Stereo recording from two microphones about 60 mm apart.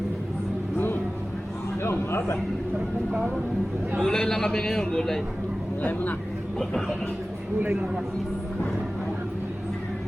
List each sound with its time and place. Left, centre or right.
1.8 s a sound: left
4.0 s a man's voice: centre
5.8 s speech: left
6.6 s speech: centre